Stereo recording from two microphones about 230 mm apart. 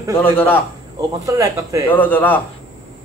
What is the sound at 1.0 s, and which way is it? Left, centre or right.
Speech, centre.